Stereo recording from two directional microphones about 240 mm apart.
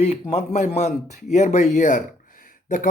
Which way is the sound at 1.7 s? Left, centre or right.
Left.